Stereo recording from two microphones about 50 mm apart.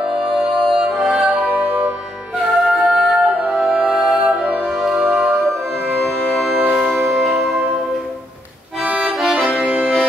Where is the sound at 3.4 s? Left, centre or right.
Right.